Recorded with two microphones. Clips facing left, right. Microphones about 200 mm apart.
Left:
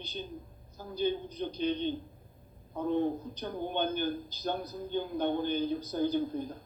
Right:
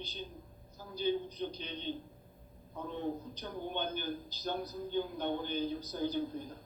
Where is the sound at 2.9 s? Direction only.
55° left (ahead or behind).